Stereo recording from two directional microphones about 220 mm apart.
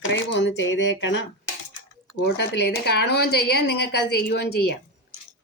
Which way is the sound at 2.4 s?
50° left (ahead or behind).